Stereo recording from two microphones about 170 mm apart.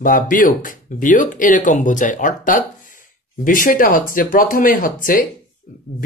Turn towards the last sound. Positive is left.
turn(degrees=55)  # may be behind; listen again after turning